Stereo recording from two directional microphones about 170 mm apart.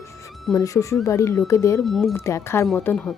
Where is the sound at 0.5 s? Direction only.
20° left (ahead or behind).